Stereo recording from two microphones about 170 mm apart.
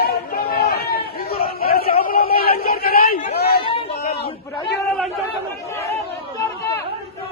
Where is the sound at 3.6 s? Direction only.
35° left (ahead or behind).